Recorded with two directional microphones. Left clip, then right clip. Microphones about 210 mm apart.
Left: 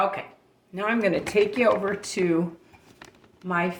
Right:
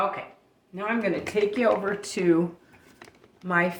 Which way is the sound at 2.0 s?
Centre (ahead or behind).